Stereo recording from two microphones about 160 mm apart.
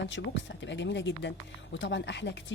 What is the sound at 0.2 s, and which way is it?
Speech, 90° left.